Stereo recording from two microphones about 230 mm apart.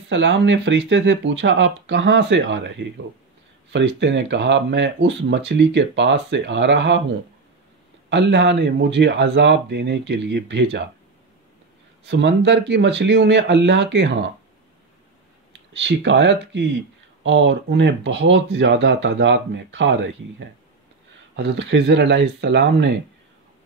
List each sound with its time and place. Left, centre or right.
0.1 s speech: right
3.7 s speech: right
8.1 s speech: right
12.1 s speech: right
15.7 s speech: right